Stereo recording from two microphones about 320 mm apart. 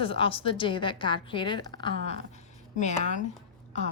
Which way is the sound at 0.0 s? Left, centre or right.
Centre.